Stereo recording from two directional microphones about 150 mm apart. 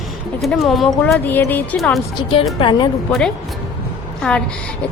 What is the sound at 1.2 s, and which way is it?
Speech, 10° left (ahead or behind).